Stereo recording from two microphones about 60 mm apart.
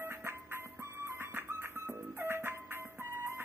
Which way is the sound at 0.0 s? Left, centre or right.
Right.